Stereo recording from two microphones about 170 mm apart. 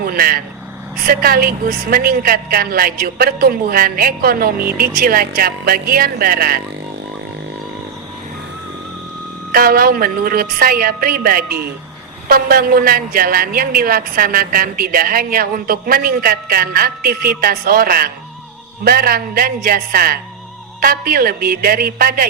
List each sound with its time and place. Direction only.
0.0 s a woman's voice: 60° right (ahead or behind)
9.5 s a woman's voice: 60° right (ahead or behind)